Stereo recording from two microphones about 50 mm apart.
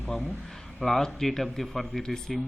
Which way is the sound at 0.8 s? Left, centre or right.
Centre.